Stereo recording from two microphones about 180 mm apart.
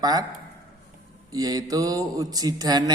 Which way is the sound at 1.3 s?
20° right (ahead or behind).